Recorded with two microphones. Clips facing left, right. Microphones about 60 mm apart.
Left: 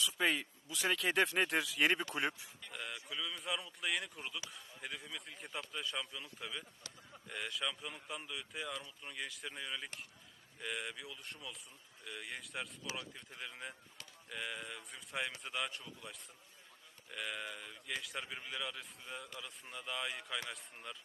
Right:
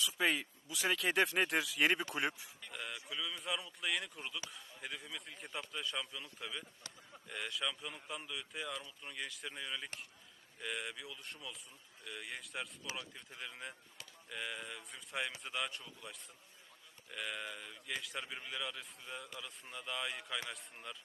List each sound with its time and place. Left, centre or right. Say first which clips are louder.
0.0 s speech: even; centre